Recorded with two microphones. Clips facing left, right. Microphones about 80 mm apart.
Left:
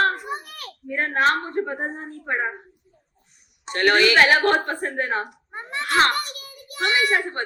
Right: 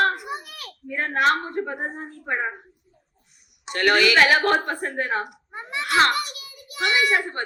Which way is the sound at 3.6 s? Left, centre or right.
Left.